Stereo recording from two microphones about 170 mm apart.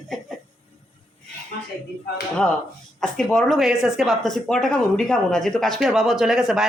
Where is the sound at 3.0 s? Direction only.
5° left (ahead or behind).